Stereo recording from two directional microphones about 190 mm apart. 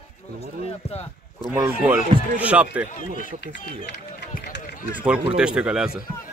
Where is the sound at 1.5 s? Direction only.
10° right (ahead or behind).